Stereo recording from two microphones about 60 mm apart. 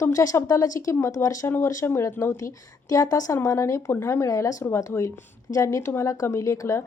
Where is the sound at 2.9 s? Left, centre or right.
Left.